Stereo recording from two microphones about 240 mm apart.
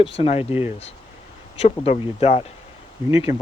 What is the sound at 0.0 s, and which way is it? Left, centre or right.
Speech, left.